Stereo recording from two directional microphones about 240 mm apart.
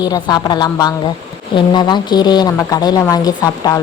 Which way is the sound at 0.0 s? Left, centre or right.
Centre.